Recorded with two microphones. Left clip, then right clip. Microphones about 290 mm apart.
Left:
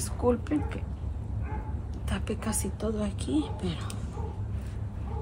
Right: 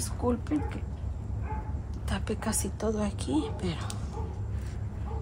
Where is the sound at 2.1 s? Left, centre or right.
Centre.